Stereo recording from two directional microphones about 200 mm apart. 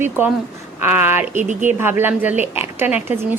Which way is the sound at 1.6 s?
10° right (ahead or behind).